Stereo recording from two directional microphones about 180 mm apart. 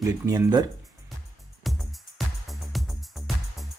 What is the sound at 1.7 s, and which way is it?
Music, centre (ahead or behind).